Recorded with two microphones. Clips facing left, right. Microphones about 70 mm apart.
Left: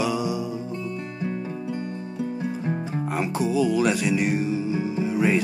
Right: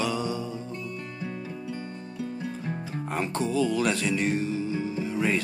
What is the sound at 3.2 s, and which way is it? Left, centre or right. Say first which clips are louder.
Speech: left 3 dB; centre.